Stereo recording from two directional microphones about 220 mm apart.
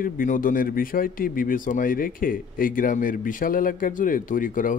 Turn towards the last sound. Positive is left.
turn(degrees=40)  # may be behind; listen again after turning